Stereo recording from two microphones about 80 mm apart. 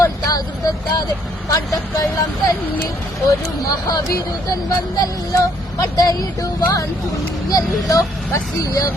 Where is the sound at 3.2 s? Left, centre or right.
Left.